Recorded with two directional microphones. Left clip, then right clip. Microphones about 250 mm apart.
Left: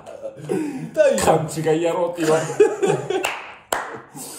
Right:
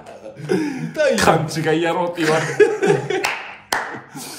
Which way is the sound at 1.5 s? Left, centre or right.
Centre.